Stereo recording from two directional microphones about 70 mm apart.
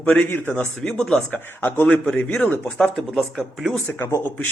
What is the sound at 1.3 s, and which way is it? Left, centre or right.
Speech, left.